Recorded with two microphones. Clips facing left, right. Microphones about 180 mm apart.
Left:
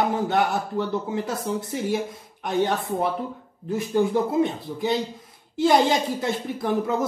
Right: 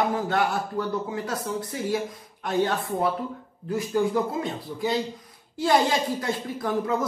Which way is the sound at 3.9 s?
25° left (ahead or behind).